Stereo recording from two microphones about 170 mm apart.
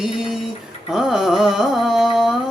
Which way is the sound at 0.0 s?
Centre (ahead or behind).